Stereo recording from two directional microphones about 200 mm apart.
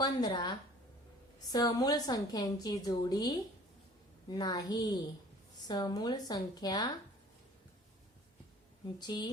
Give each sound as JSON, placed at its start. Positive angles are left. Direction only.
{"t": 0.0, "sound": "a woman's voice", "side_deg": 20}
{"t": 9.0, "sound": "a woman's voice", "side_deg": 20}